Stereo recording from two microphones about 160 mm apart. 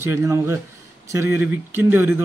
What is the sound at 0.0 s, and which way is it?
A man's voice, 15° right (ahead or behind).